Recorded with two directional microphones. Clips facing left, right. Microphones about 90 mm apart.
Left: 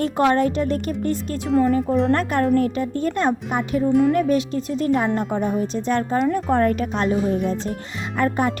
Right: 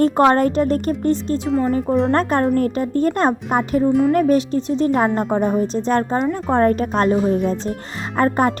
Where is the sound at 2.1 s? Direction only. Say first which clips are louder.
Right 2 dB; 35° right (ahead or behind).